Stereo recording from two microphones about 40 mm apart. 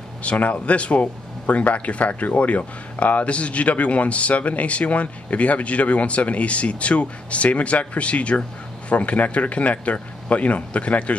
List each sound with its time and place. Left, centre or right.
0.2 s speech: left